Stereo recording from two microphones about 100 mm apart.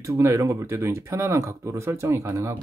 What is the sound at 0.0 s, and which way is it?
Speech, 30° right (ahead or behind).